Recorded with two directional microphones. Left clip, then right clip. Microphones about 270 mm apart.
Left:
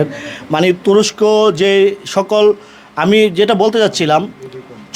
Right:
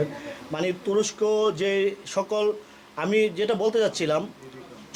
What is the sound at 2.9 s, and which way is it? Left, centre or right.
A man's voice, left.